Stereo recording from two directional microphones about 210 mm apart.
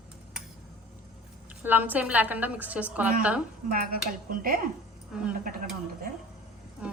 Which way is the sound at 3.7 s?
45° right (ahead or behind).